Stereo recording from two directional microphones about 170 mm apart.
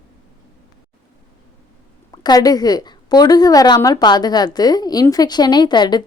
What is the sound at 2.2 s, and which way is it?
A woman's voice, 20° left (ahead or behind).